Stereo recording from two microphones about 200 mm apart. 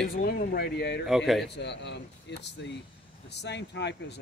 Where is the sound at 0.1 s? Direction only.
45° left (ahead or behind).